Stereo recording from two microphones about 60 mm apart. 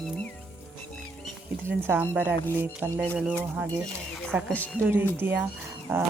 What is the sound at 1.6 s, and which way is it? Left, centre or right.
Speech, right.